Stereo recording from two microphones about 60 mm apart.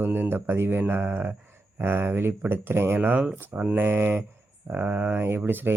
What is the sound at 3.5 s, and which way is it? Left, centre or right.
Speech, right.